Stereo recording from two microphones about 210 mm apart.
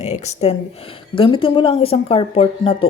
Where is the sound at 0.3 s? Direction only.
30° left (ahead or behind).